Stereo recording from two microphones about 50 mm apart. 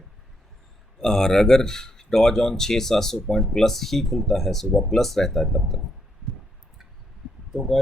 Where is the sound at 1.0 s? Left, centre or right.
Centre.